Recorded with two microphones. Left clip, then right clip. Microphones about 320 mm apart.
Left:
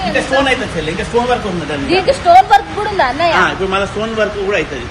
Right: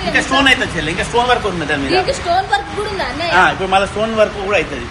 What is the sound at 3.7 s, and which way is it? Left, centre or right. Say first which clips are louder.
Speech: right 2 dB; centre.